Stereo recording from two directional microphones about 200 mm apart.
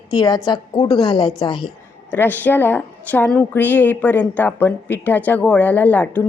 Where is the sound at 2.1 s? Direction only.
10° left (ahead or behind).